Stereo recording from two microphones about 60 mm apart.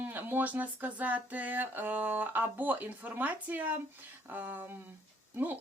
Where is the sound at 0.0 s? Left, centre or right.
Right.